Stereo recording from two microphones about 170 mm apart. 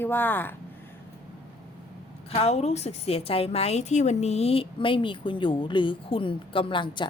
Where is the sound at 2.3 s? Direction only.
40° left (ahead or behind).